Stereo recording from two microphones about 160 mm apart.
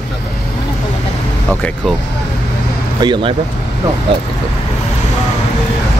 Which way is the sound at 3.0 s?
30° right (ahead or behind).